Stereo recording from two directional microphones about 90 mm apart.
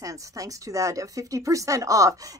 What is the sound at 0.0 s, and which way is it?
Speech, 40° right (ahead or behind).